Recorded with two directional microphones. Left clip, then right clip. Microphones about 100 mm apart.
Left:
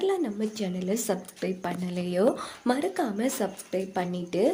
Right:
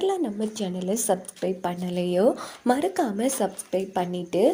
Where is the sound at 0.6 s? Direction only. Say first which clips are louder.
Right 3 dB; 25° right (ahead or behind).